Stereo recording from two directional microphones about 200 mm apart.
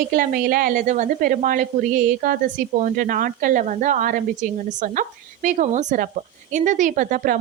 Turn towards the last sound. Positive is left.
turn(degrees=-40)  # may be behind; listen again after turning